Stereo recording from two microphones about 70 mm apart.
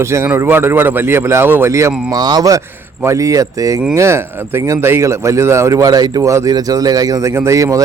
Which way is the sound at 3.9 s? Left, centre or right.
Right.